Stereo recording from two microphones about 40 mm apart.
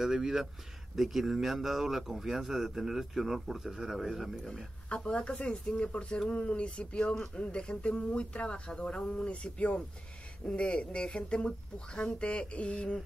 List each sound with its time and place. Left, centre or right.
0.0 s speech: centre
4.8 s speech: left